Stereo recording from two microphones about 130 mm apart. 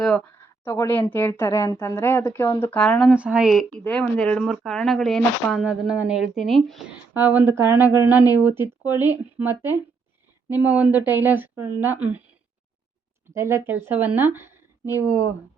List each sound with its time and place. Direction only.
0.3 s speech: 20° left (ahead or behind)
3.1 s speech: 10° right (ahead or behind)
3.7 s speech: 5° left (ahead or behind)
7.1 s speech: 15° right (ahead or behind)
13.3 s speech: 20° right (ahead or behind)